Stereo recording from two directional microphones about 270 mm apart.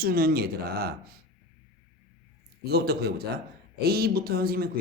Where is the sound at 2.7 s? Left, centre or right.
Right.